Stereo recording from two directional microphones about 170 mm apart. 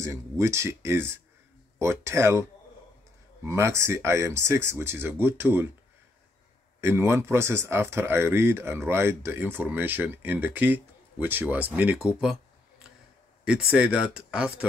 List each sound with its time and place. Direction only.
0.0 s speech: 15° right (ahead or behind)
3.4 s speech: 15° right (ahead or behind)
6.8 s speech: 15° right (ahead or behind)
13.5 s speech: 5° right (ahead or behind)